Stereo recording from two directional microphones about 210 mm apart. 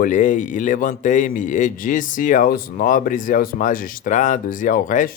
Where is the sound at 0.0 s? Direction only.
40° left (ahead or behind).